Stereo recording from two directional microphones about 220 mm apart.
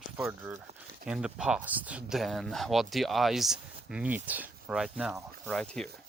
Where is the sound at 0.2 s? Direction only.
10° right (ahead or behind).